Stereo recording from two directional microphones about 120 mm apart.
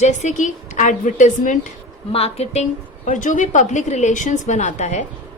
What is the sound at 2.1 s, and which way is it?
Speech, 60° left (ahead or behind).